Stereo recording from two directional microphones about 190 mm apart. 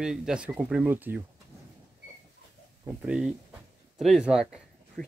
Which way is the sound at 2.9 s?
5° right (ahead or behind).